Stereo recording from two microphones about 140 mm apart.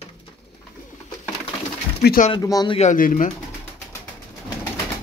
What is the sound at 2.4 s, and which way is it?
Speech, 25° left (ahead or behind).